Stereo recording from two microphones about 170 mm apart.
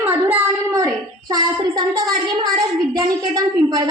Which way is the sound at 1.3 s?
25° right (ahead or behind).